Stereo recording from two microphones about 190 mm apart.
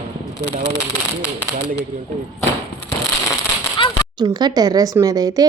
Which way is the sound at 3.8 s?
25° left (ahead or behind).